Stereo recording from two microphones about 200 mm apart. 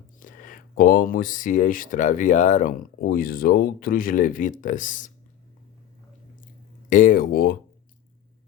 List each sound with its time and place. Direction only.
0.2 s speech: 40° left (ahead or behind)
6.9 s speech: 45° left (ahead or behind)